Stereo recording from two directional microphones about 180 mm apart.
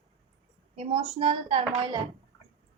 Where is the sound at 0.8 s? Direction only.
30° right (ahead or behind).